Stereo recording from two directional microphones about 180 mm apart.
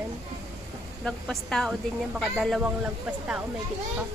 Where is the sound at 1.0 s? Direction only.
Centre (ahead or behind).